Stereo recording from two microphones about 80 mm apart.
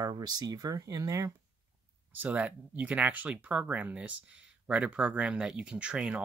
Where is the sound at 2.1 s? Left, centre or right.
Right.